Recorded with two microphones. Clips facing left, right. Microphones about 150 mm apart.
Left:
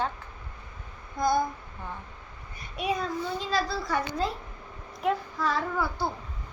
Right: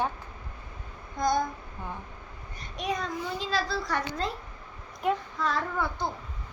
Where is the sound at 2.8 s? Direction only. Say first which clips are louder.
Left 2 dB; 5° left (ahead or behind).